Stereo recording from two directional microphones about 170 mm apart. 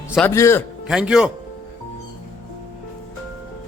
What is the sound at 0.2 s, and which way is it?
Speech, 15° left (ahead or behind).